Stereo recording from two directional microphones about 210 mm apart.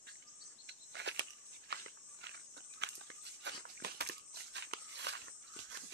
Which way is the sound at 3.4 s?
50° right (ahead or behind).